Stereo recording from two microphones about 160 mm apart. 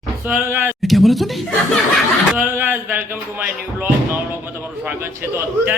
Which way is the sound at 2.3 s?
10° right (ahead or behind).